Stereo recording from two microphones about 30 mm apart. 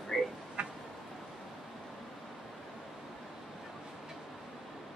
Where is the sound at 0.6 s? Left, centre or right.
Right.